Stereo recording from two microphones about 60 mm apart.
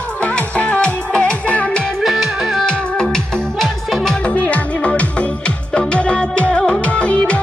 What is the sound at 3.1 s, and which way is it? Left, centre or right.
Music, centre.